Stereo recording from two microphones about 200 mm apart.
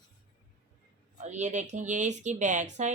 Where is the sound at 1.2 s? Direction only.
35° right (ahead or behind).